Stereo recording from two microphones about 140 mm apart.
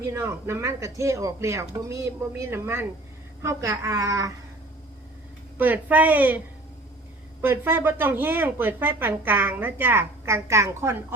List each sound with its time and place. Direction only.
0.0 s speech: 20° right (ahead or behind)
5.5 s speech: 10° right (ahead or behind)
7.4 s speech: 15° right (ahead or behind)